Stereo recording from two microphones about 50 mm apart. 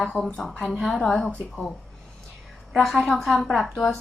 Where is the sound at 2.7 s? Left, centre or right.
Centre.